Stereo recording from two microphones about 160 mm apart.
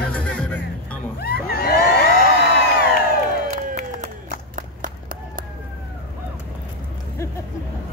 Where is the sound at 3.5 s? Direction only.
50° right (ahead or behind).